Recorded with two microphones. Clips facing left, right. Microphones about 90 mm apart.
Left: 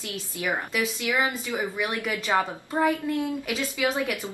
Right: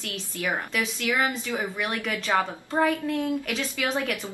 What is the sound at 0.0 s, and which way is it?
A woman's voice, 15° left (ahead or behind).